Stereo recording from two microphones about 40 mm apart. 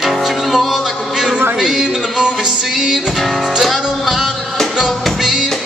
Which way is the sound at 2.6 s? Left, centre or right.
Centre.